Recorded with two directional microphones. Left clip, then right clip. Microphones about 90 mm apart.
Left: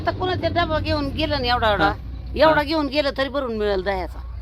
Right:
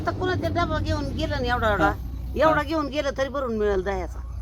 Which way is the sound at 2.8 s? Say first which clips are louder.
Left 4 dB; 35° left (ahead or behind).